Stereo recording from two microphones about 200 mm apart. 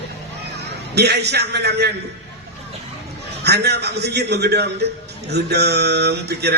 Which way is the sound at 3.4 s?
55° right (ahead or behind).